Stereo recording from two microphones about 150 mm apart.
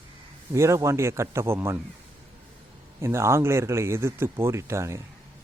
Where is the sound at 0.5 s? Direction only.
20° right (ahead or behind).